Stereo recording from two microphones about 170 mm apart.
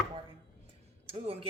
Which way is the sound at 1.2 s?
35° right (ahead or behind).